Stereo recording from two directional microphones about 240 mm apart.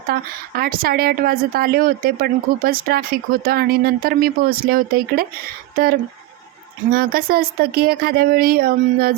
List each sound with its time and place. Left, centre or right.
0.1 s speech: right